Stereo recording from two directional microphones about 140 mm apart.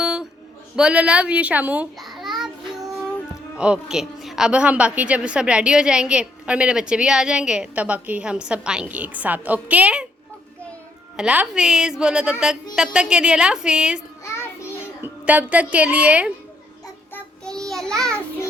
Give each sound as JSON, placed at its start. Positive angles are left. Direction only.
{"t": 0.0, "sound": "a sound", "side_deg": -5}
{"t": 0.8, "sound": "a woman's voice", "side_deg": -5}
{"t": 2.0, "sound": "child singing", "side_deg": 0}
{"t": 3.6, "sound": "a woman's voice", "side_deg": -5}
{"t": 11.2, "sound": "a woman's voice", "side_deg": -5}
{"t": 14.3, "sound": "child singing", "side_deg": 20}
{"t": 15.0, "sound": "a woman's voice", "side_deg": -10}
{"t": 17.2, "sound": "child singing", "side_deg": 5}